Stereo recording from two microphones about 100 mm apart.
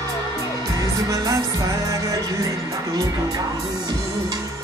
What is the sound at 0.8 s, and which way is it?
Music, 35° right (ahead or behind).